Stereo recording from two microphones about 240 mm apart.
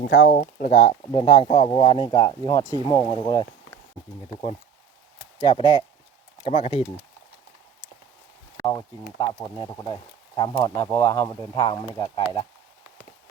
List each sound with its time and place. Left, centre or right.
0.0 s speech: left
0.8 s speech: centre
5.4 s speech: centre
9.1 s speech: centre